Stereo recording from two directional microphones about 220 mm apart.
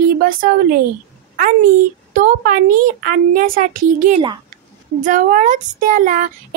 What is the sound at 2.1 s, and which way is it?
A woman's voice, 40° right (ahead or behind).